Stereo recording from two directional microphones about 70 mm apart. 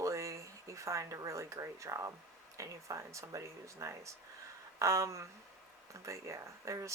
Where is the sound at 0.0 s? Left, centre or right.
Right.